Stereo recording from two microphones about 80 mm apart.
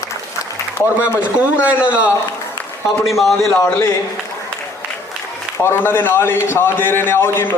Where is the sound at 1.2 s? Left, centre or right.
Centre.